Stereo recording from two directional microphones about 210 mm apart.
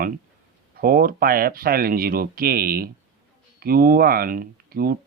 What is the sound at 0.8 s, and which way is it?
Speech, 45° right (ahead or behind).